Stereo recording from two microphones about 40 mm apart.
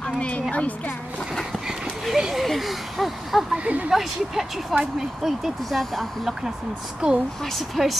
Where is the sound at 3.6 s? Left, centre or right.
Right.